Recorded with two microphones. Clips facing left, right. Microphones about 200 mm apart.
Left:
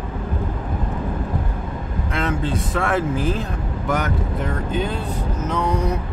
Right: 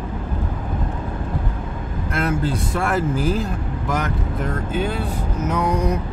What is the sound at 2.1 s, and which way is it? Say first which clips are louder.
Speech: right 1 dB; 5° right (ahead or behind).